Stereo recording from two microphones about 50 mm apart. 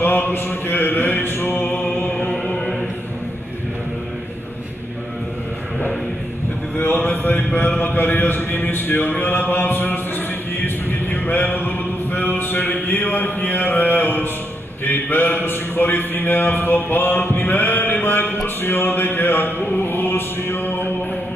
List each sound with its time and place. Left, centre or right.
0.0 s a man's voice: left
2.3 s chant: centre
7.3 s a man's voice: left
9.2 s a sound: left
14.9 s speech: left
18.0 s a sound: left
18.6 s music: left